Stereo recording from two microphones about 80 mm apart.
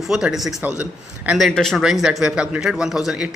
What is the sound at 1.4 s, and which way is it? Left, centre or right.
Speech, centre.